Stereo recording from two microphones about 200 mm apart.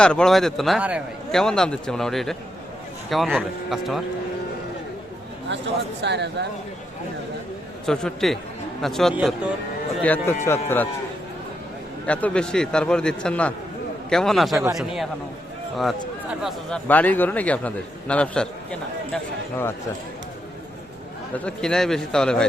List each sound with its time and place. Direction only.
0.0 s a man's voice: 5° left (ahead or behind)
6.0 s speech: 60° right (ahead or behind)
7.9 s a man's voice: centre (ahead or behind)
12.0 s a man's voice: 5° left (ahead or behind)
14.5 s a man's voice: 15° right (ahead or behind)
14.8 s a man's voice: centre (ahead or behind)
16.4 s a man's voice: centre (ahead or behind)
21.3 s a man's voice: 5° left (ahead or behind)